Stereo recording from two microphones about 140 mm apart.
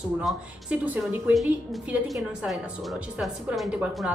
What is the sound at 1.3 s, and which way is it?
A woman's voice, centre (ahead or behind).